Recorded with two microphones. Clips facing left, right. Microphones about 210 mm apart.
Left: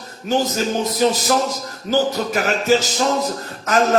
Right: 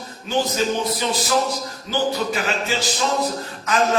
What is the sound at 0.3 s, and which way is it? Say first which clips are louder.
A man's voice: left 2 dB; 40° left (ahead or behind).